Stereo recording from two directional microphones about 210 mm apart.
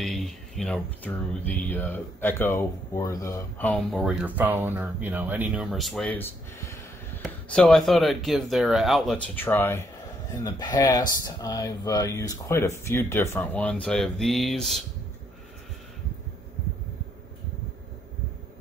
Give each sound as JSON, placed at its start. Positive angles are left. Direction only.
{"t": 0.0, "sound": "speech", "side_deg": 0}
{"t": 7.4, "sound": "speech", "side_deg": 5}